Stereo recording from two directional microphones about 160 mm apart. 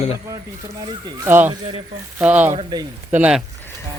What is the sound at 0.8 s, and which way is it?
Speech, 25° right (ahead or behind).